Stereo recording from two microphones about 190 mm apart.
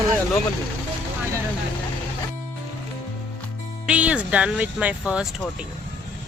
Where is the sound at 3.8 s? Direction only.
5° right (ahead or behind).